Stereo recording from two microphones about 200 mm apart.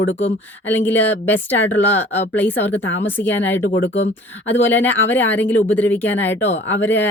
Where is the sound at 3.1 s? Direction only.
10° left (ahead or behind).